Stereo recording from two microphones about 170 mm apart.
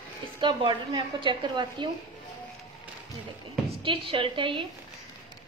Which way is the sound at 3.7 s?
30° right (ahead or behind).